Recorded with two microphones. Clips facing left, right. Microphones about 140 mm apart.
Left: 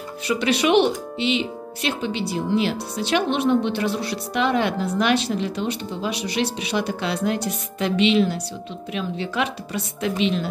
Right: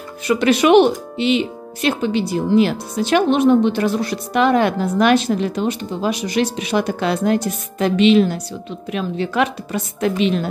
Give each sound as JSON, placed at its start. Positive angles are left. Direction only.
{"t": 0.3, "sound": "speech", "side_deg": -50}